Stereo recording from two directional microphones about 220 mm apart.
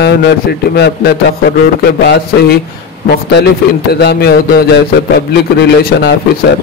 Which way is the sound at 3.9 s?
45° left (ahead or behind).